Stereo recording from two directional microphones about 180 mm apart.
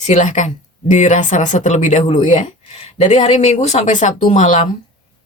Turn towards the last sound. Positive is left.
turn(degrees=40)  # may be behind; listen again after turning